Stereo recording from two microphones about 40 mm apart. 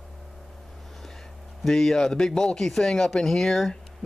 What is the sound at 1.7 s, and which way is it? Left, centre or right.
Speech, centre.